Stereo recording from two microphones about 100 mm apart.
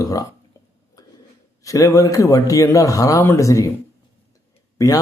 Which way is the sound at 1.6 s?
35° left (ahead or behind).